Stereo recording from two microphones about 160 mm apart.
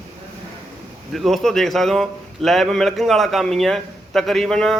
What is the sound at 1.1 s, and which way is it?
A man's voice, centre (ahead or behind).